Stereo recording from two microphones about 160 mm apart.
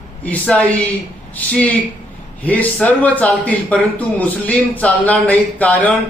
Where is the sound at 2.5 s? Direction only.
10° left (ahead or behind).